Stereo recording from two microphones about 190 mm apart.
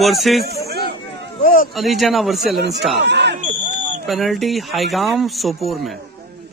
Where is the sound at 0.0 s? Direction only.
Centre (ahead or behind).